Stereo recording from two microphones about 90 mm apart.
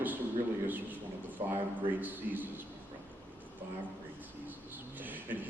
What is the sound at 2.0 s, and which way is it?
Speech, 20° right (ahead or behind).